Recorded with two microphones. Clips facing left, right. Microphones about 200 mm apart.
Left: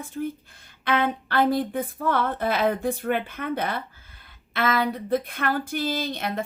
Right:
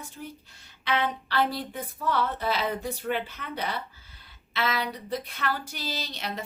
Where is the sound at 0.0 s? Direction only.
50° left (ahead or behind).